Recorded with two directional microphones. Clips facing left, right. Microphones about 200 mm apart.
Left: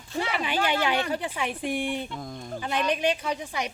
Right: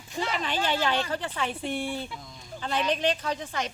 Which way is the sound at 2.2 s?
55° left (ahead or behind).